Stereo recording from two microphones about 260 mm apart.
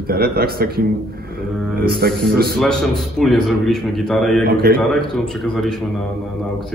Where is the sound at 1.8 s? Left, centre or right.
Right.